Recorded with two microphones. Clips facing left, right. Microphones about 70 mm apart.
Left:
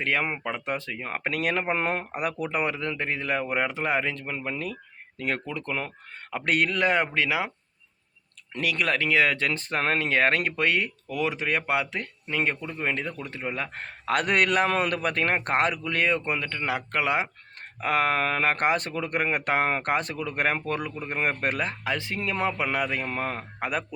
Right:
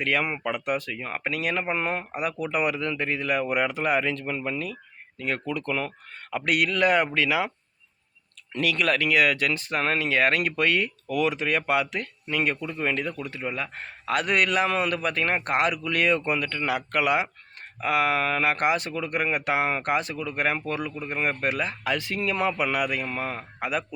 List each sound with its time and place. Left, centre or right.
0.0 s speech: left
2.5 s speech: left
4.5 s speech: left
5.5 s speech: left
8.5 s speech: left
17.7 s speech: left
21.8 s speech: left